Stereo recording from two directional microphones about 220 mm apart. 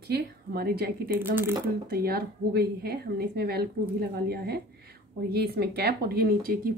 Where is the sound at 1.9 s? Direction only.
45° right (ahead or behind).